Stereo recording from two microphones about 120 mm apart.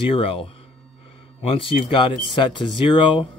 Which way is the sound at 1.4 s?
50° left (ahead or behind).